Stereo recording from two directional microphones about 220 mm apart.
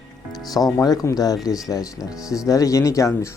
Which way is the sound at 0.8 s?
15° left (ahead or behind).